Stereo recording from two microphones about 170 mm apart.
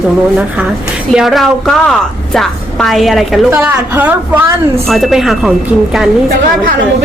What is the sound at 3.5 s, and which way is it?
Speech, 10° right (ahead or behind).